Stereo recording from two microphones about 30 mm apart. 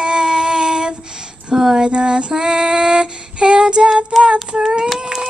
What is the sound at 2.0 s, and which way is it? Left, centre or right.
Female singing, right.